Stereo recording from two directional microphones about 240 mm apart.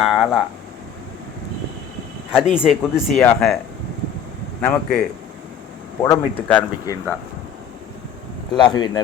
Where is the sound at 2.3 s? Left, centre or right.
Centre.